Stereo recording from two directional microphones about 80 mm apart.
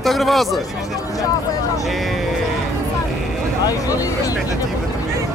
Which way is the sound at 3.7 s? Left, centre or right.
Left.